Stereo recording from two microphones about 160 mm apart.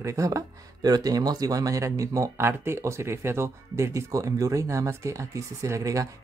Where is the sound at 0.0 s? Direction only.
20° right (ahead or behind).